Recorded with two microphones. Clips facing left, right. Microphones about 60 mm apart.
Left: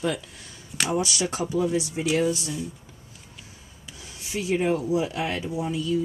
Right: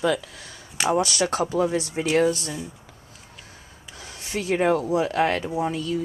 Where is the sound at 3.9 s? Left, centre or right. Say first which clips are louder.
Right 2 dB; right.